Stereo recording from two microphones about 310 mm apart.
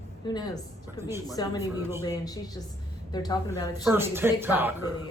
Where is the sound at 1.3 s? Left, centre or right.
Centre.